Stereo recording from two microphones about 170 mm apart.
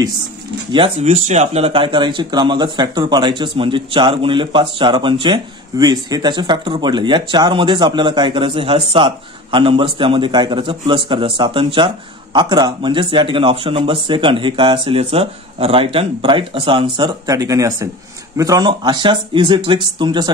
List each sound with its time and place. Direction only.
0.7 s speech: 30° right (ahead or behind)